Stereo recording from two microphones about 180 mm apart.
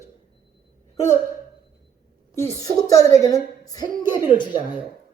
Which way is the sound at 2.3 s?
15° left (ahead or behind).